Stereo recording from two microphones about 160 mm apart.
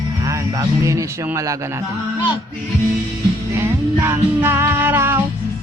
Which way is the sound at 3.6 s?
15° right (ahead or behind).